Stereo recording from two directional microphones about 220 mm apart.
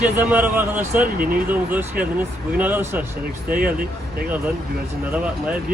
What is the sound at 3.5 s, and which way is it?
Speech, 40° right (ahead or behind).